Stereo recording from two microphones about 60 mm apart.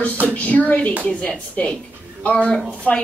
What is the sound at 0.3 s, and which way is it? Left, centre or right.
Speech, left.